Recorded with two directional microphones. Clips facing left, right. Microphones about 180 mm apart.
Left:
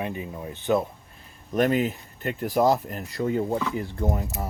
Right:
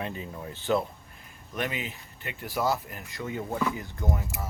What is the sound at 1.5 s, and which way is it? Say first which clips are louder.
Speech: left 11 dB; 45° left (ahead or behind).